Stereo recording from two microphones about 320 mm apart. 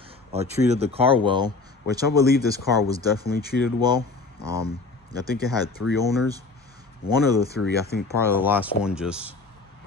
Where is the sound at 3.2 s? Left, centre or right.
Left.